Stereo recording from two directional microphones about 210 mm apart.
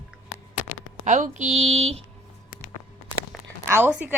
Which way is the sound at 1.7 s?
30° right (ahead or behind).